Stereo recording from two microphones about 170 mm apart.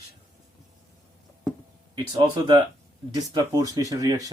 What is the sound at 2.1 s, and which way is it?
Speech, 25° right (ahead or behind).